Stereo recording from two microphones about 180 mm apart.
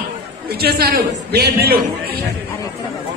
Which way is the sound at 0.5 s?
60° right (ahead or behind).